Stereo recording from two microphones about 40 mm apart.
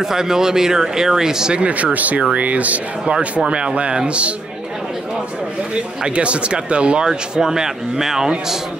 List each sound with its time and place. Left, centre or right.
0.0 s speech: centre
1.6 s speech: right
3.1 s speech: right
5.8 s speech: right
7.1 s speech: centre